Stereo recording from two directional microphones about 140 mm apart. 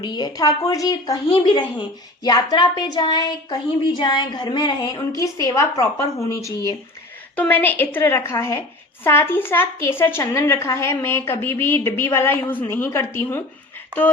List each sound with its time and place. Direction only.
0.0 s a woman's voice: 30° left (ahead or behind)
7.3 s a woman's voice: 10° left (ahead or behind)